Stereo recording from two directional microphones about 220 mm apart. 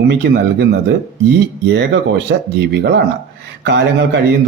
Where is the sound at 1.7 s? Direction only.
50° right (ahead or behind).